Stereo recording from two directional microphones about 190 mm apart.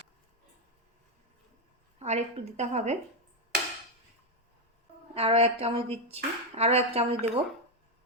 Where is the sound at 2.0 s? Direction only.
35° right (ahead or behind).